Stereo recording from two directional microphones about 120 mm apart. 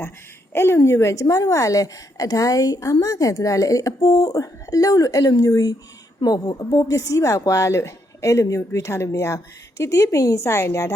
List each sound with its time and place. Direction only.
0.5 s a woman's voice: 20° left (ahead or behind)